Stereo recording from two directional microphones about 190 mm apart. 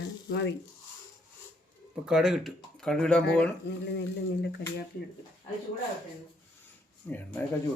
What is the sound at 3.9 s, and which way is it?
Speech, 60° left (ahead or behind).